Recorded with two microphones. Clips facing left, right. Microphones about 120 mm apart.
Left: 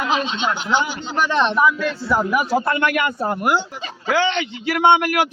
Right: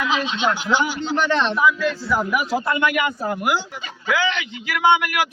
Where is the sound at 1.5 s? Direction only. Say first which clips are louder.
Left 1 dB; 50° left (ahead or behind).